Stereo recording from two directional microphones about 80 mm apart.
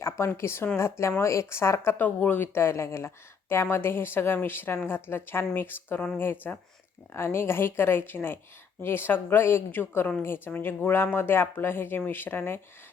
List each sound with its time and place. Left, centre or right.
0.3 s a woman's voice: left